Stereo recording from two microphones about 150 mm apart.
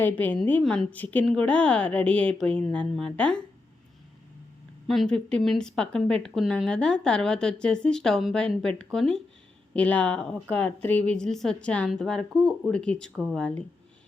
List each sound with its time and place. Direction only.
0.0 s speech: 10° left (ahead or behind)
4.9 s speech: 5° left (ahead or behind)